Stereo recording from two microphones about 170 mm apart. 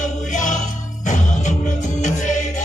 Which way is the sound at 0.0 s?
50° left (ahead or behind).